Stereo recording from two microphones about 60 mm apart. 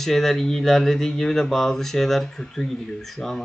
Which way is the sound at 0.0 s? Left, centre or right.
Centre.